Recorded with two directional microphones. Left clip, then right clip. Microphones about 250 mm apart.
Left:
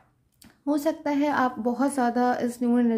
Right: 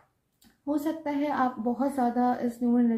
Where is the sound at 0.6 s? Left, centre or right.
Left.